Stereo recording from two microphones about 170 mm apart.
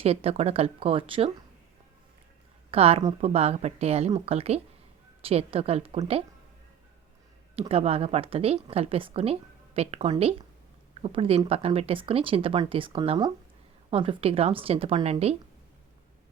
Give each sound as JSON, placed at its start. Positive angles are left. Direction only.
{"t": 0.0, "sound": "speech", "side_deg": -35}
{"t": 2.6, "sound": "a woman's voice", "side_deg": -35}
{"t": 7.7, "sound": "speech", "side_deg": -35}